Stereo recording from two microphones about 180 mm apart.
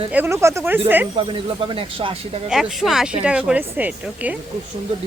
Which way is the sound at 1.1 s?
30° right (ahead or behind).